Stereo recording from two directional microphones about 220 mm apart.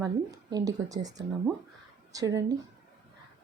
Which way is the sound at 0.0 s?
15° right (ahead or behind).